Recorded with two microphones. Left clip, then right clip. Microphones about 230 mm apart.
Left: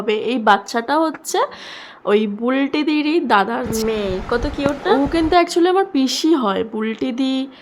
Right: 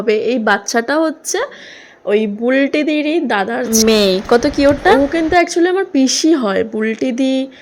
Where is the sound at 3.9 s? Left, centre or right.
Right.